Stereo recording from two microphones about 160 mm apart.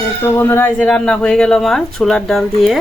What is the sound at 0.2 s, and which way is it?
A woman's voice, 15° left (ahead or behind).